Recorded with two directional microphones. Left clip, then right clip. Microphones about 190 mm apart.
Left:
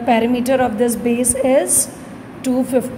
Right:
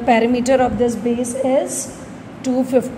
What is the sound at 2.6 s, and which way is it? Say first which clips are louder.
Speech: right 1 dB; centre (ahead or behind).